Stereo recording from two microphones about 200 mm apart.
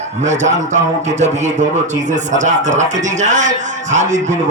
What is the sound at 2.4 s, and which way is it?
A man's voice, 35° right (ahead or behind).